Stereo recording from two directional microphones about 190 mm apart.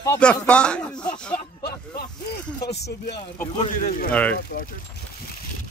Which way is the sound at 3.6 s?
45° left (ahead or behind).